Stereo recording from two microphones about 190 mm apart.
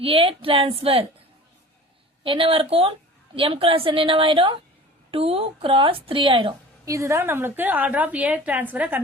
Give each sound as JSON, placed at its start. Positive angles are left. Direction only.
{"t": 0.0, "sound": "a woman's voice", "side_deg": -30}
{"t": 2.2, "sound": "a woman's voice", "side_deg": -25}
{"t": 6.9, "sound": "a woman's voice", "side_deg": -15}